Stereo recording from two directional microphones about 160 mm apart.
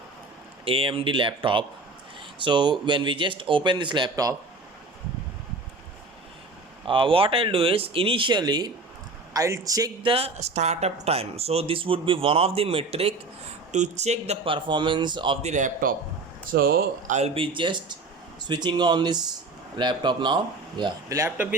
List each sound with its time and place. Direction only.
0.6 s speech: 35° right (ahead or behind)
6.8 s speech: 30° right (ahead or behind)
10.1 s speech: 40° right (ahead or behind)
15.4 s a man's voice: 45° right (ahead or behind)
16.5 s speech: 65° right (ahead or behind)
17.2 s speech: 40° right (ahead or behind); by 21.5 s 15° right (ahead or behind)